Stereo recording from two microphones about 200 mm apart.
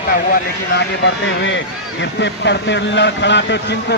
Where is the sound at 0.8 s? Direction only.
65° left (ahead or behind).